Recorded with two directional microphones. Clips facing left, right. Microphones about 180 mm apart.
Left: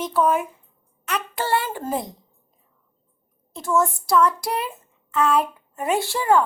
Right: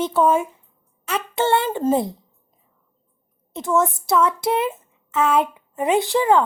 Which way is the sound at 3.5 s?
20° right (ahead or behind).